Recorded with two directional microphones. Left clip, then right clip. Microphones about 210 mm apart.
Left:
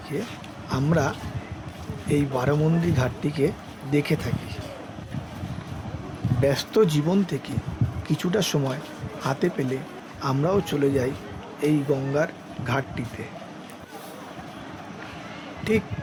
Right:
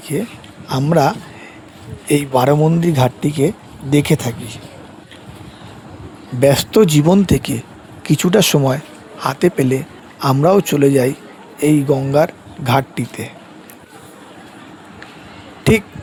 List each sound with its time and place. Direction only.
0.1 s speech: 45° right (ahead or behind)
6.4 s speech: 40° right (ahead or behind)
15.7 s speech: 45° right (ahead or behind)